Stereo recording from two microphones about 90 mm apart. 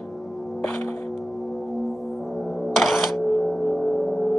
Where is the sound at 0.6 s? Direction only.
20° left (ahead or behind).